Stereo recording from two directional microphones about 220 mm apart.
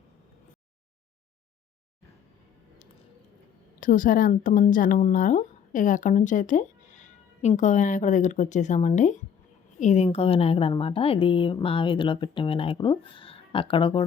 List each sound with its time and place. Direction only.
3.8 s a woman's voice: 35° left (ahead or behind)